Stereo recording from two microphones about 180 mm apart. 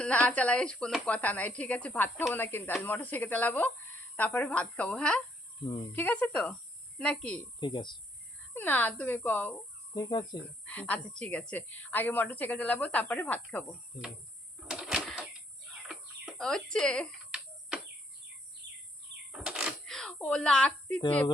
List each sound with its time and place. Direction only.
0.0 s a woman's voice: 5° left (ahead or behind)
7.6 s speech: 25° left (ahead or behind)
8.5 s a woman's voice: 10° left (ahead or behind)
9.9 s speech: 25° left (ahead or behind)
10.7 s a woman's voice: 10° left (ahead or behind)
14.7 s a sound: 5° right (ahead or behind)
18.6 s bird vocalization: 75° right (ahead or behind)
19.3 s a sound: 5° right (ahead or behind)